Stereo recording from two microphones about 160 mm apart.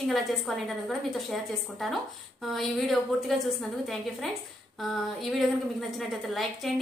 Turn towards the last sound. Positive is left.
turn(degrees=0)  # may be behind; listen again after turning